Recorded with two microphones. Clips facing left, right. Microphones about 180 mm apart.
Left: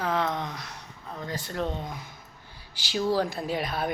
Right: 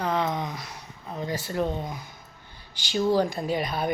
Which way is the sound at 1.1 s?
20° right (ahead or behind).